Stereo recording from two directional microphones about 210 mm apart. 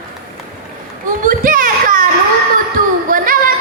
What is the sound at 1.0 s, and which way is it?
Children playing, 40° right (ahead or behind).